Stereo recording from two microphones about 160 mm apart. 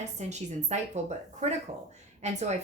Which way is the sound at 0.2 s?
45° right (ahead or behind).